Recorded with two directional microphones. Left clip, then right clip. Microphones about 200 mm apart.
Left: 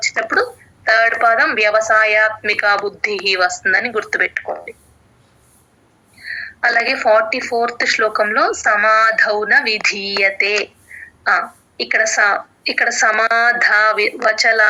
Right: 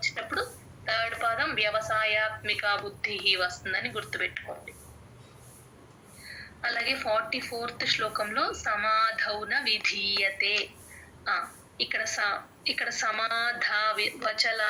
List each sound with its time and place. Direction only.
0.0 s a sound: 45° left (ahead or behind)
0.9 s a woman's voice: 45° left (ahead or behind)
6.6 s a woman's voice: 45° left (ahead or behind)